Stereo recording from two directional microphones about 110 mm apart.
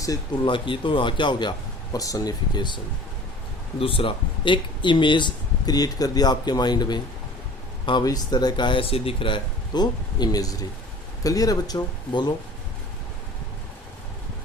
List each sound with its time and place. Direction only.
0.4 s speech: 50° left (ahead or behind)
3.8 s speech: 55° left (ahead or behind); by 7.0 s 40° left (ahead or behind)
8.0 s speech: 40° left (ahead or behind)